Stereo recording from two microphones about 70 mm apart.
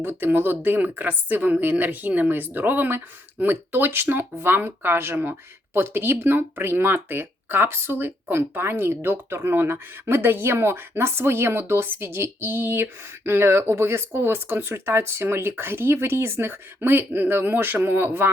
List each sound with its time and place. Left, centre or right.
0.0 s a woman's voice: right